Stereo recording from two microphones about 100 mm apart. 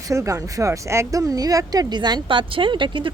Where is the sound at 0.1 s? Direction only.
30° right (ahead or behind).